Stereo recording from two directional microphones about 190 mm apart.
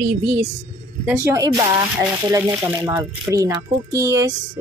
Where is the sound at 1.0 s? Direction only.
10° right (ahead or behind).